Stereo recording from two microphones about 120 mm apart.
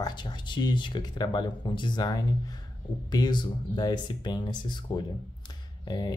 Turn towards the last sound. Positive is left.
turn(degrees=35)  # may be behind; listen again after turning